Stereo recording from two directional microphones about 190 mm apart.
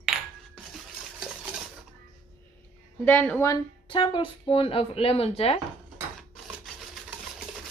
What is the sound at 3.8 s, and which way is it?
Speech, 25° left (ahead or behind).